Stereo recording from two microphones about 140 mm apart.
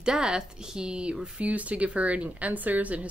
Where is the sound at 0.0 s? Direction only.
5° right (ahead or behind).